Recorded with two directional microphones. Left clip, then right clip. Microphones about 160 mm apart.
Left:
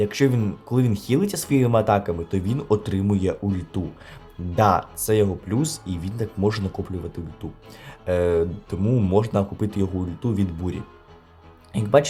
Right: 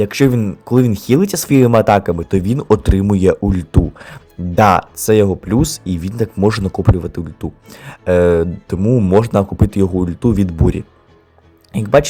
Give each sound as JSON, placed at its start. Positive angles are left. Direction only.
{"t": 0.0, "sound": "speech", "side_deg": -40}
{"t": 8.8, "sound": "speech", "side_deg": -25}
{"t": 9.1, "sound": "speech", "side_deg": -40}